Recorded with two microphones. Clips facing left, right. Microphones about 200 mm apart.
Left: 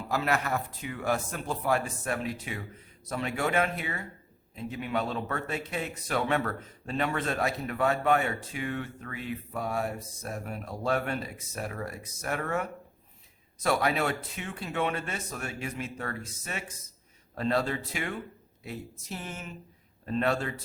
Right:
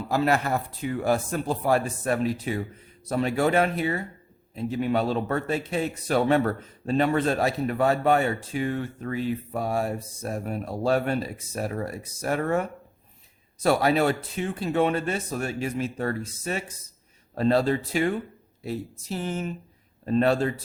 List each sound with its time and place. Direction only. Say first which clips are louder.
0.1 s speech: right 5 dB; 30° right (ahead or behind)